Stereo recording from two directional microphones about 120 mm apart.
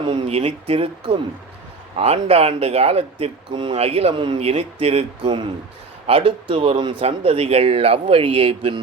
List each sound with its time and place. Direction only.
0.0 s a man's voice: 45° right (ahead or behind)
3.5 s speech: 40° right (ahead or behind)
3.8 s a man's voice: 55° right (ahead or behind)
7.0 s speech: 60° right (ahead or behind)